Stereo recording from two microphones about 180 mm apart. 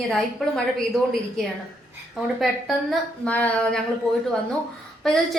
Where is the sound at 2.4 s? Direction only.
Centre (ahead or behind).